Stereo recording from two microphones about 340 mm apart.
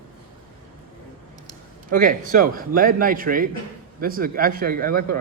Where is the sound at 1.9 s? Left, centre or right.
Right.